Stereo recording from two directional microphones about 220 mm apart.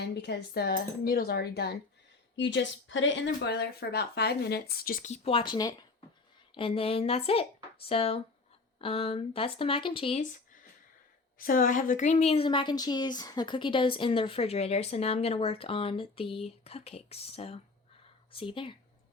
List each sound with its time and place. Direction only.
0.0 s a woman's voice: 50° left (ahead or behind); by 18.8 s 25° left (ahead or behind)